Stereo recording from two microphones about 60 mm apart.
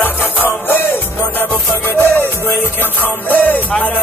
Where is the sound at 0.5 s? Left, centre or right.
Left.